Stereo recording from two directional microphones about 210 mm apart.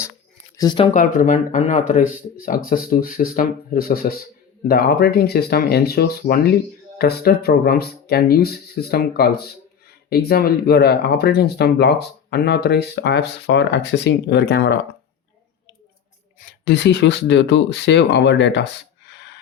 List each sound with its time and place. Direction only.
0.5 s speech: 20° left (ahead or behind)
0.9 s speech: 40° left (ahead or behind)
16.6 s speech: 55° left (ahead or behind)